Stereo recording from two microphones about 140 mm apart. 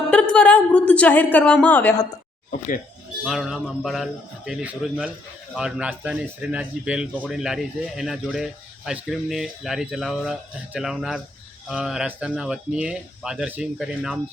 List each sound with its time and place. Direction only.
0.1 s a woman's voice: 10° left (ahead or behind)
2.5 s speech: 70° left (ahead or behind)
3.2 s a man's voice: 5° right (ahead or behind)